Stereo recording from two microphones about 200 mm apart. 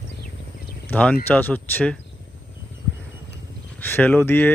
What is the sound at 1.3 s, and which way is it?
Speech, 10° left (ahead or behind).